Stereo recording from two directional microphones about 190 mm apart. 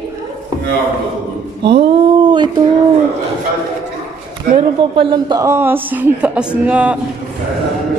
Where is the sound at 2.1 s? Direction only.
25° right (ahead or behind).